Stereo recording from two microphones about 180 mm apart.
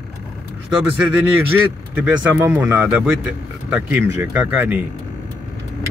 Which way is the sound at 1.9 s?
10° right (ahead or behind).